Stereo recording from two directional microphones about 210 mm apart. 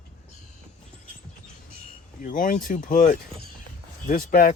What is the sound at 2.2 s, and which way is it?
Speech, 40° left (ahead or behind).